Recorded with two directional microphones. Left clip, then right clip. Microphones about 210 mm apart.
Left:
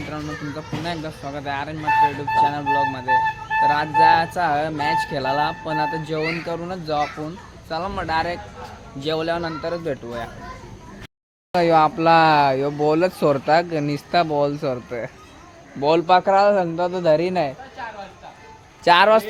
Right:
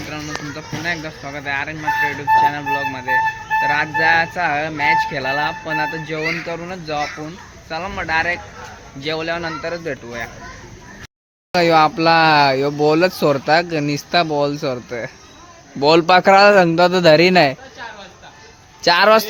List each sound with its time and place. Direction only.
0.1 s speech: 10° left (ahead or behind)
11.5 s speech: 10° right (ahead or behind)
15.8 s a man's voice: 35° right (ahead or behind)
18.8 s a man's voice: 20° right (ahead or behind)